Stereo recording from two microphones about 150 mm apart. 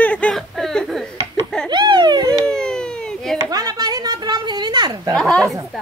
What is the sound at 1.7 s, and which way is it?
Speech, 30° right (ahead or behind).